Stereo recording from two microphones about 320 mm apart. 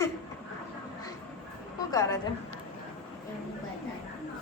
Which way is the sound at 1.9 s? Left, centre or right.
Centre.